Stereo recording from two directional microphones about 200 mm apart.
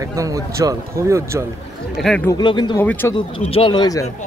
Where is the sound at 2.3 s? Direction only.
20° left (ahead or behind).